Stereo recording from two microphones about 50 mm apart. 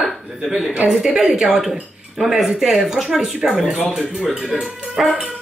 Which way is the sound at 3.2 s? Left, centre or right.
Centre.